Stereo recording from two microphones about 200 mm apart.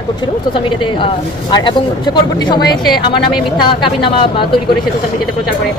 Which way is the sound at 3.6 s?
25° left (ahead or behind).